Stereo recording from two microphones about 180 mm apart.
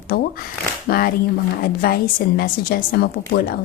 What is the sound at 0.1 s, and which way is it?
A woman's voice, 60° left (ahead or behind).